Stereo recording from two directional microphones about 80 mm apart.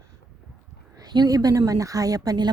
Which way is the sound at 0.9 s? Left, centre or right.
Right.